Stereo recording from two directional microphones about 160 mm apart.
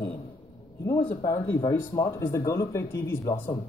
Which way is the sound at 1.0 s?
25° left (ahead or behind).